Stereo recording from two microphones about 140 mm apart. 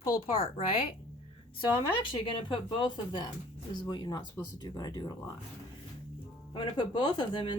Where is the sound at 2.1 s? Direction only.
35° left (ahead or behind).